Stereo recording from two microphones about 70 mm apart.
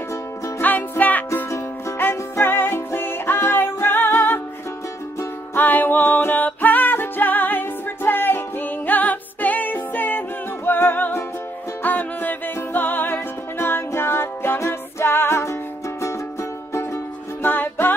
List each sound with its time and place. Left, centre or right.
0.6 s music: left
5.5 s music: left
16.7 s music: left
17.5 s music: left